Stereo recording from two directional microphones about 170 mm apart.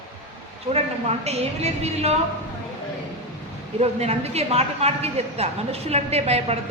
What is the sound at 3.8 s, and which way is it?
A woman's voice, 40° right (ahead or behind).